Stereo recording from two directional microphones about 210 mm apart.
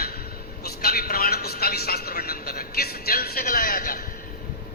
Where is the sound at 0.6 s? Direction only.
45° left (ahead or behind).